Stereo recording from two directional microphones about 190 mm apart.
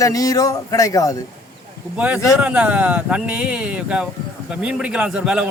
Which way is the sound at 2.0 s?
5° right (ahead or behind).